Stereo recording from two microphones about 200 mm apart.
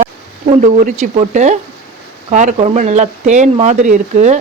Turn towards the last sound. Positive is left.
turn(degrees=-35)  # may be behind; listen again after turning